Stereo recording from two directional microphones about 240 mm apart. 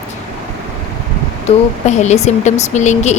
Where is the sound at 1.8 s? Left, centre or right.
Left.